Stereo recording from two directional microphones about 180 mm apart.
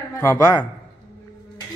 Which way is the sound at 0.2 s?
15° left (ahead or behind).